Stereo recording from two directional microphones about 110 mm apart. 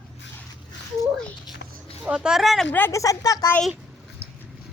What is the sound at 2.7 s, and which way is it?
Speech, 20° left (ahead or behind).